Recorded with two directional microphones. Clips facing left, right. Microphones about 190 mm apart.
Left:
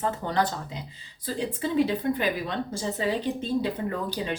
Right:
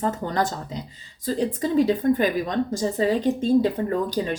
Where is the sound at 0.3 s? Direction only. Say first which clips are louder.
Right 2 dB; 45° right (ahead or behind).